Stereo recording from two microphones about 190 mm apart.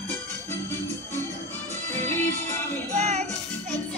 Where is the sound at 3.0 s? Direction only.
35° right (ahead or behind).